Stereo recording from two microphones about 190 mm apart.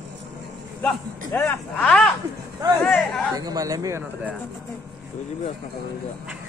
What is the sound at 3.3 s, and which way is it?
Speech, 20° right (ahead or behind).